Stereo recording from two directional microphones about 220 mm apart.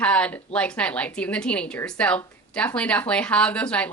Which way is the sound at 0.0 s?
5° left (ahead or behind).